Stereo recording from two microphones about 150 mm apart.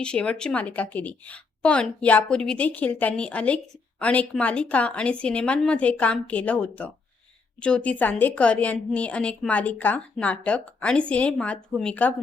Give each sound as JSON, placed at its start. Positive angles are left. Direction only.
{"t": 0.0, "sound": "a woman's voice", "side_deg": 5}